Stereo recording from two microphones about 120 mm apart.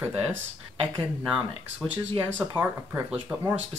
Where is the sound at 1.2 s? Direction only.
5° right (ahead or behind).